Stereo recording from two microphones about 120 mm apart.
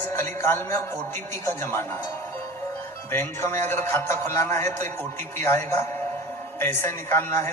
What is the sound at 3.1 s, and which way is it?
A man's voice, 20° left (ahead or behind).